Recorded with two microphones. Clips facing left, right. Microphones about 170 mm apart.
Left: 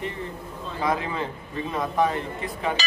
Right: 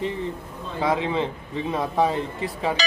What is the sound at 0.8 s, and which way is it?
Speech, 25° right (ahead or behind).